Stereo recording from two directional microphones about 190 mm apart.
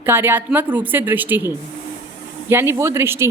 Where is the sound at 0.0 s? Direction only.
10° right (ahead or behind).